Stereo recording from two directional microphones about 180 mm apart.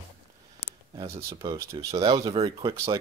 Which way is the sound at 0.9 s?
30° right (ahead or behind).